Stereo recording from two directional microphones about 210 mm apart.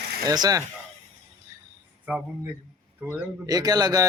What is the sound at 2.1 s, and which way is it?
Speech, 5° right (ahead or behind).